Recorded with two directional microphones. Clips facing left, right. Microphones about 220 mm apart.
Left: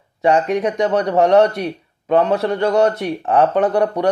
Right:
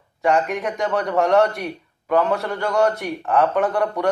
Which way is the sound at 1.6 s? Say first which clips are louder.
Left 5 dB; 30° left (ahead or behind).